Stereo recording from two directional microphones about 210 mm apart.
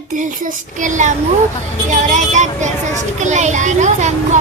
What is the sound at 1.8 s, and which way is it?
A child's voice, 35° right (ahead or behind).